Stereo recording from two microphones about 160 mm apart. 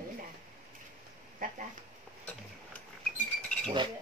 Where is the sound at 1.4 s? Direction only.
60° right (ahead or behind).